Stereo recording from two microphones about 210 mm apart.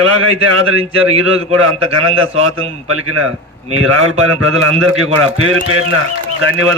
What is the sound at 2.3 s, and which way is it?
Speech, 30° right (ahead or behind).